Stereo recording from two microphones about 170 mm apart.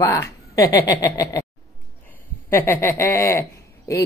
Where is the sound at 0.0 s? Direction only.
20° left (ahead or behind).